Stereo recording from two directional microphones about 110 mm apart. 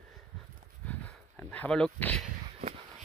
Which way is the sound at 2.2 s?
90° right.